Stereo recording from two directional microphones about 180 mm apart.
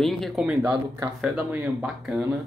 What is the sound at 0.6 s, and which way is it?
Speech, 20° right (ahead or behind).